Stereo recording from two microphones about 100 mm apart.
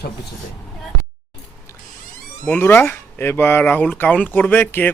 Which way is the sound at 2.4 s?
20° left (ahead or behind).